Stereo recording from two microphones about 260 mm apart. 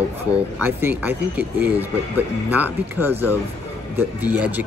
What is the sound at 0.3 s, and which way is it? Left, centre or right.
Speech, centre.